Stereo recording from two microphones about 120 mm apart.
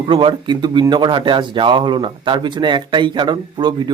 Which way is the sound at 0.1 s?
45° right (ahead or behind).